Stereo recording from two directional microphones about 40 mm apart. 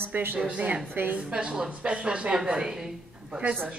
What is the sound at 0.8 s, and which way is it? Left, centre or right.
Speech, right.